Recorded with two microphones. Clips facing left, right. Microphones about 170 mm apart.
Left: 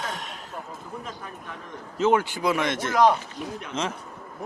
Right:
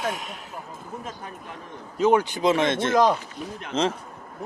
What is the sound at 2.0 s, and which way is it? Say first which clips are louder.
Speech: right 2 dB; 15° right (ahead or behind).